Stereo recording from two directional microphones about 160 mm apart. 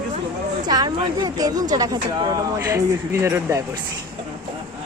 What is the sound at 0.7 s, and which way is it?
A woman's voice, 25° right (ahead or behind).